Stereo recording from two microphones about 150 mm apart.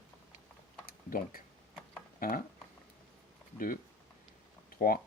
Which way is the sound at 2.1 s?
70° left (ahead or behind).